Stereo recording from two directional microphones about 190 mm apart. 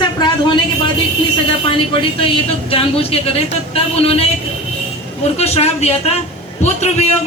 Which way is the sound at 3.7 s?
30° left (ahead or behind).